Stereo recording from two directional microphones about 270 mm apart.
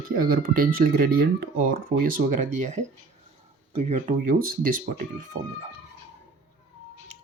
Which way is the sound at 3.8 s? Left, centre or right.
Right.